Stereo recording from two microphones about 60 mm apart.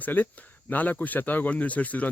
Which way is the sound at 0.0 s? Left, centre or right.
Left.